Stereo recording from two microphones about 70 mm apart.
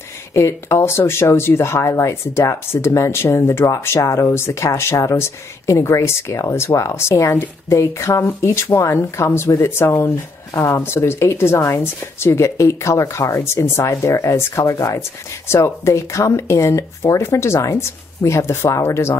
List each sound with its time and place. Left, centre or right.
0.3 s speech: left
15.0 s speech: left